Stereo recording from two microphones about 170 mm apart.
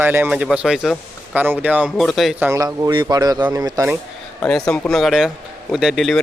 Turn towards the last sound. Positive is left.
turn(degrees=0)  # may be behind; listen again after turning